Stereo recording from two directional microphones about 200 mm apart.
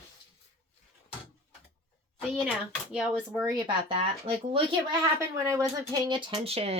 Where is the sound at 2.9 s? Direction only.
5° right (ahead or behind).